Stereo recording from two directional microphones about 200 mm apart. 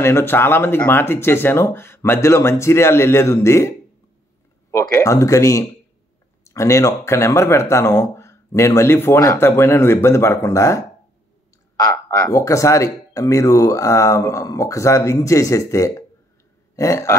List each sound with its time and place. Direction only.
0.0 s speech: 10° left (ahead or behind)